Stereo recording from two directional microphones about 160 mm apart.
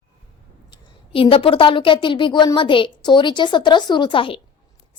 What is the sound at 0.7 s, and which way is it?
A woman's voice, 35° left (ahead or behind).